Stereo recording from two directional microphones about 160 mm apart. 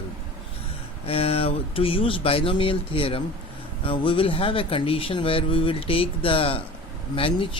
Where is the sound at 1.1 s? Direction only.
35° left (ahead or behind).